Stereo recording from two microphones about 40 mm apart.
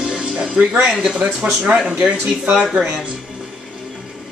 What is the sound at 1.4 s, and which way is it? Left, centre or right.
Speech, right.